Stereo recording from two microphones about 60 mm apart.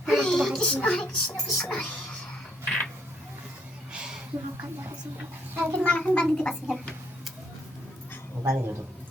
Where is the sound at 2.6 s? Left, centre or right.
Centre.